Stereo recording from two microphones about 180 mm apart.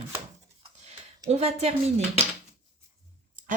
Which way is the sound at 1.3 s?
35° right (ahead or behind).